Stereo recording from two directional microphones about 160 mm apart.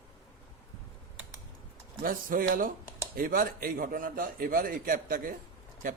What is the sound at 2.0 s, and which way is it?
Speech, 60° right (ahead or behind).